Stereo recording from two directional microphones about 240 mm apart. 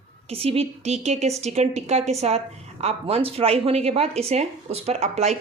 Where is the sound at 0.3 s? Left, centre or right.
Right.